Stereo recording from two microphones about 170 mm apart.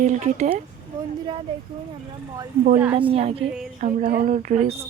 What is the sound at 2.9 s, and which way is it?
Speech, 35° right (ahead or behind).